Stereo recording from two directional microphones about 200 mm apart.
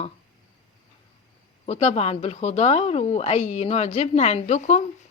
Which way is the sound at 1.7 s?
35° left (ahead or behind).